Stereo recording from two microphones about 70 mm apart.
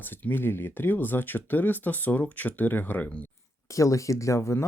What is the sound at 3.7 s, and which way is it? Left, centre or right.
Speech, left.